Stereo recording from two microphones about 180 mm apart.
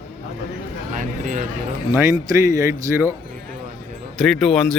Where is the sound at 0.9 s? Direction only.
45° right (ahead or behind).